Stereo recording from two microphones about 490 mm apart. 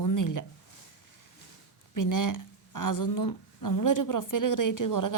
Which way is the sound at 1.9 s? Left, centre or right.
Left.